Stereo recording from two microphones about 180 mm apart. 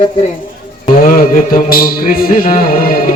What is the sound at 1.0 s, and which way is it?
Music, 50° left (ahead or behind).